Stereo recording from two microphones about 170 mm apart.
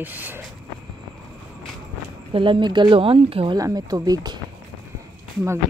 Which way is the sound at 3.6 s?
20° right (ahead or behind).